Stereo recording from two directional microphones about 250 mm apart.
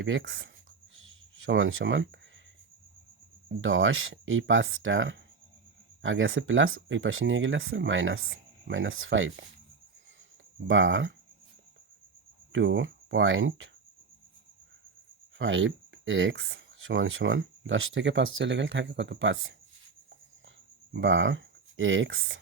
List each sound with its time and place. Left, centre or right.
0.0 s speech: right
0.9 s writing: right
3.6 s speech: right
10.7 s speech: right
12.5 s speech: right
15.4 s speech: right
20.9 s speech: right